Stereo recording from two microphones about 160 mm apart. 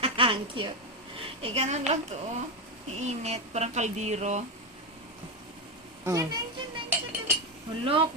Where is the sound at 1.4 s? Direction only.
45° right (ahead or behind).